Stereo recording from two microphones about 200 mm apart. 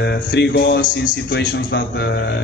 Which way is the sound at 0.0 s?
55° left (ahead or behind).